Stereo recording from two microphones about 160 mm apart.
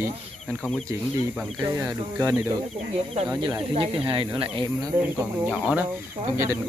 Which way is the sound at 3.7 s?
35° right (ahead or behind).